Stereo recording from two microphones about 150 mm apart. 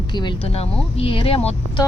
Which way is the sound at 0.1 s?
30° left (ahead or behind).